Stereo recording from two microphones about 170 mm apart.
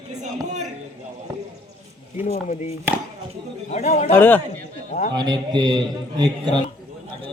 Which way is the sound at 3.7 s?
40° left (ahead or behind).